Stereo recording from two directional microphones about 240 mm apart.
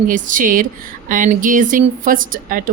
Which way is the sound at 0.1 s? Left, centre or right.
Right.